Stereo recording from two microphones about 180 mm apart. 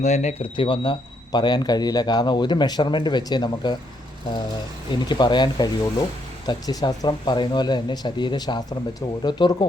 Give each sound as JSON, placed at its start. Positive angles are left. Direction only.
{"t": 0.0, "sound": "speech", "side_deg": 40}
{"t": 4.9, "sound": "speech", "side_deg": 25}